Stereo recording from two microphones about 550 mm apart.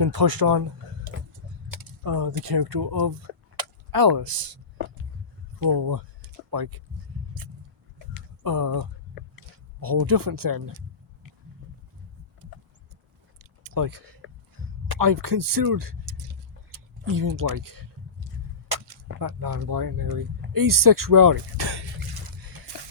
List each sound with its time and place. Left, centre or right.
0.0 s speech: right
1.7 s speech: right
8.4 s speech: right
13.4 s a sound: right
19.2 s speech: right